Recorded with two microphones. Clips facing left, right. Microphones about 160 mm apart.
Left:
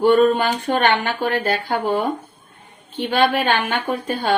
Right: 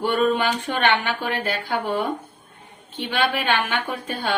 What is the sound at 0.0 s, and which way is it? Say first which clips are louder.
Speech: left 6 dB; 40° left (ahead or behind).